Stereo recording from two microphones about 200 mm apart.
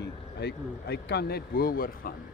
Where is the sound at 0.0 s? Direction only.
55° left (ahead or behind).